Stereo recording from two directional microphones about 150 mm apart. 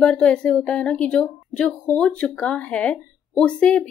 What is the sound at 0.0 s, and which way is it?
Speech, 5° left (ahead or behind).